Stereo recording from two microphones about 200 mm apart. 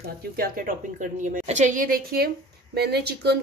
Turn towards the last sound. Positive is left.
turn(degrees=-55)  # may be behind; listen again after turning